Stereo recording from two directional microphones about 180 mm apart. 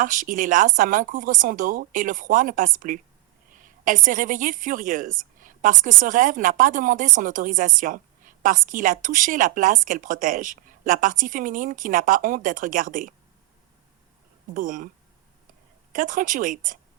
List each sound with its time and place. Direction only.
0.0 s a woman's voice: 45° right (ahead or behind)
14.5 s a woman's voice: 45° right (ahead or behind)
15.9 s a woman's voice: 50° right (ahead or behind)